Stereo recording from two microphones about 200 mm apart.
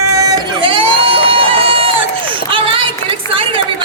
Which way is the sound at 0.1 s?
15° right (ahead or behind).